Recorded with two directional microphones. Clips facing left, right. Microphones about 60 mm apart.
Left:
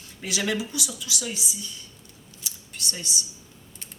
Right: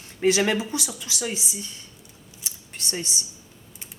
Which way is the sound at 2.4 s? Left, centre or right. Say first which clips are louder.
Even; right.